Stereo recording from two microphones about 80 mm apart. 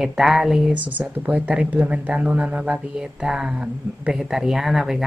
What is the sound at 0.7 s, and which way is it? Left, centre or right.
Speech, right.